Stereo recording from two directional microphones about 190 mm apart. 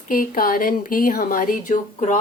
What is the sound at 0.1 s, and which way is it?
A woman's voice, 50° left (ahead or behind).